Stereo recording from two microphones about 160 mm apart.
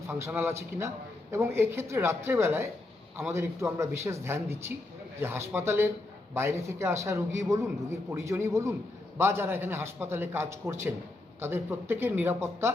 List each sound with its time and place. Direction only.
0.1 s a man's voice: 15° right (ahead or behind)